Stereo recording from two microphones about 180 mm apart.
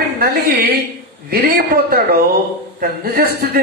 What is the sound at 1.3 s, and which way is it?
A man's voice, 55° right (ahead or behind).